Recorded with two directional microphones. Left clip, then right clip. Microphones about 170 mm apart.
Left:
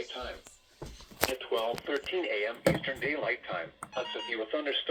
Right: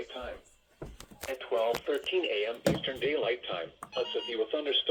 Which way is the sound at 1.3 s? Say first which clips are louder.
Right 7 dB; 5° right (ahead or behind).